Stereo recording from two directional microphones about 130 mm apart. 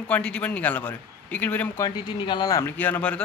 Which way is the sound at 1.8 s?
35° left (ahead or behind).